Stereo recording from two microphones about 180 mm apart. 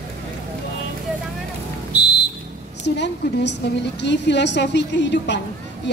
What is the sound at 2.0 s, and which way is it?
Music, 70° left (ahead or behind).